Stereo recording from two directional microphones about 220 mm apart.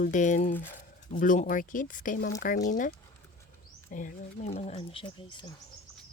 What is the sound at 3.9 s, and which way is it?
Speech, 35° left (ahead or behind).